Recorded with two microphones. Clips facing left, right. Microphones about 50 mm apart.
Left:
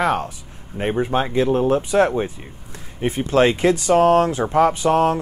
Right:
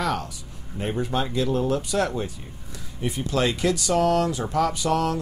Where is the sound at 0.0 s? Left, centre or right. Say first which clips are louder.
Left 6 dB; left.